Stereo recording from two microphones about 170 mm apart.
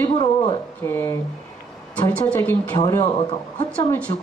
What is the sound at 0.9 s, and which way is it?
A woman's voice, 15° left (ahead or behind).